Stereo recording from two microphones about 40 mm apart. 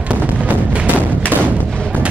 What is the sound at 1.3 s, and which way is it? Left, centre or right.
Artillery fire, right.